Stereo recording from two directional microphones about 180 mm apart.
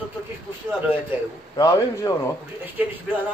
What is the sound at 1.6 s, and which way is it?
Speech, 20° left (ahead or behind).